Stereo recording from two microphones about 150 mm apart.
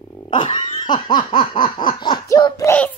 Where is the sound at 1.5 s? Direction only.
30° left (ahead or behind).